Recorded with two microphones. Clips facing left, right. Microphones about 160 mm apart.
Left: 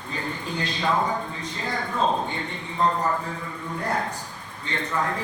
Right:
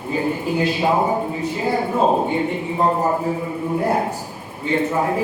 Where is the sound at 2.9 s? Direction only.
25° right (ahead or behind).